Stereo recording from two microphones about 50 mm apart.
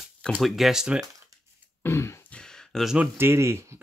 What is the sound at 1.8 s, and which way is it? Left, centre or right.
Throat clearing, left.